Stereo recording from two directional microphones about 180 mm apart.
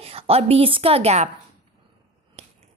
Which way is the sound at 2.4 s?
35° right (ahead or behind).